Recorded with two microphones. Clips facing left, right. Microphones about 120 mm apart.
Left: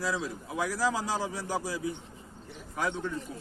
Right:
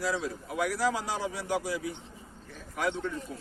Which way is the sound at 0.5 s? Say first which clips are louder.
Right 1 dB; 35° left (ahead or behind).